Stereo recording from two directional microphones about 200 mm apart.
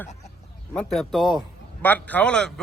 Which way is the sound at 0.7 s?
5° left (ahead or behind).